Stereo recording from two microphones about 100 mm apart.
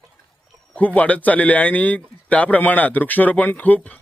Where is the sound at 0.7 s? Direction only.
15° left (ahead or behind).